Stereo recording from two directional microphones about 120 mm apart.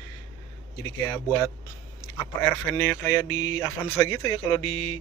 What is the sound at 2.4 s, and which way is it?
Speech, 20° left (ahead or behind).